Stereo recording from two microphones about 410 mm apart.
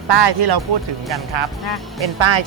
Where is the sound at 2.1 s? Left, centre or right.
Right.